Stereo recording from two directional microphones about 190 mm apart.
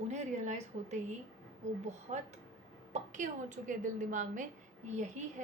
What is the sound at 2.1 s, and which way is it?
A woman's voice, 40° right (ahead or behind).